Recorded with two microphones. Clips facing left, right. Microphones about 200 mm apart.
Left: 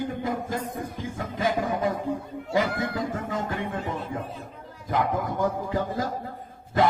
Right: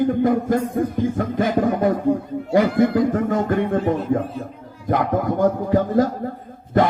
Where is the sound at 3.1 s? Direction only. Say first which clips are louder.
Right 10 dB; 55° right (ahead or behind).